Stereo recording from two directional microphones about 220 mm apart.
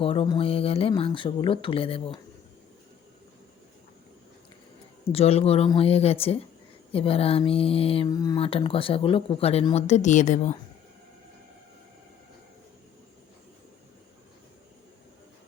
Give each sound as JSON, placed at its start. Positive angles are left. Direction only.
{"t": 0.0, "sound": "speech", "side_deg": 25}
{"t": 5.1, "sound": "speech", "side_deg": 25}